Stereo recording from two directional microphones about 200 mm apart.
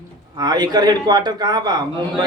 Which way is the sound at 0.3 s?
20° right (ahead or behind).